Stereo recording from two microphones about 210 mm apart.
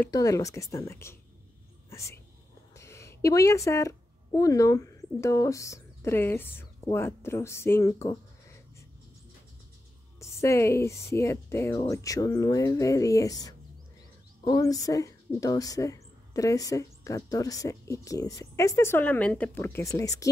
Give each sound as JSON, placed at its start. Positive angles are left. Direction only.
{"t": 0.0, "sound": "speech", "side_deg": 15}
{"t": 1.9, "sound": "a sound", "side_deg": 15}
{"t": 2.7, "sound": "speech", "side_deg": 15}
{"t": 10.2, "sound": "speech", "side_deg": 15}